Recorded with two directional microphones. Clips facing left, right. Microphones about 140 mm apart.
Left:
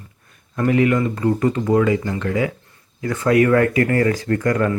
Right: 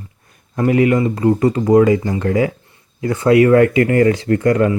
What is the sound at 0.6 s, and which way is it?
Speech, 25° right (ahead or behind).